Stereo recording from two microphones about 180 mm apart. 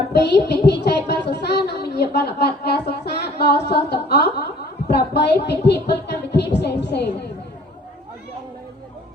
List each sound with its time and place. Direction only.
0.1 s child singing: 70° left (ahead or behind)